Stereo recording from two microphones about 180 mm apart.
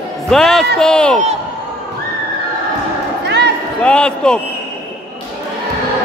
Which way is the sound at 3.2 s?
70° right (ahead or behind).